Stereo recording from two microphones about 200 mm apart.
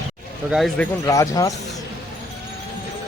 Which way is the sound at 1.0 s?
15° left (ahead or behind).